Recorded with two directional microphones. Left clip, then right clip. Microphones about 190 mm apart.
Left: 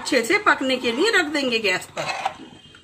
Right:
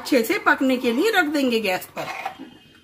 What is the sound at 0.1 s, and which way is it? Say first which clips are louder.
Speech: left 1 dB; 60° right (ahead or behind).